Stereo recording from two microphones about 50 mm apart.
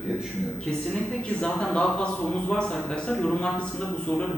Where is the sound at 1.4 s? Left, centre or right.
Centre.